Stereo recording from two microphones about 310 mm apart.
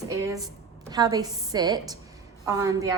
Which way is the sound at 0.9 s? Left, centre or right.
Centre.